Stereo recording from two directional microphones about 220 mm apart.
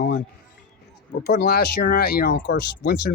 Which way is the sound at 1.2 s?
50° left (ahead or behind).